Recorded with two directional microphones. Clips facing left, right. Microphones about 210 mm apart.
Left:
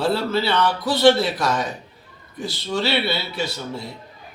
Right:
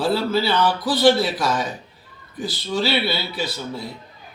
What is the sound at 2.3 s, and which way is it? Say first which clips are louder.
Speech: right 1 dB; 25° left (ahead or behind).